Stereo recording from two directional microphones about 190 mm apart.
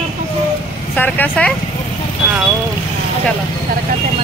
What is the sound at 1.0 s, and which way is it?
Vehicle, 10° left (ahead or behind).